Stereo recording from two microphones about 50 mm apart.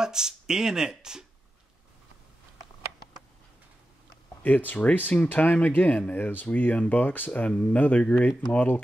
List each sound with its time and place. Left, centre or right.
0.0 s speech: centre
4.4 s speech: left